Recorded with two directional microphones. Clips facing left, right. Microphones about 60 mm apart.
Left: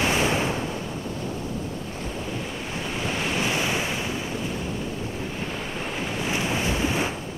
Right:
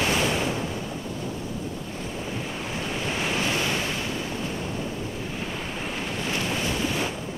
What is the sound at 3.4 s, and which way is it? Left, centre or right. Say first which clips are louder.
Waves: left 1 dB; centre.